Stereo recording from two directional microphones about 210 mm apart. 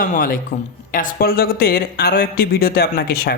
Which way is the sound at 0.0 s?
40° left (ahead or behind).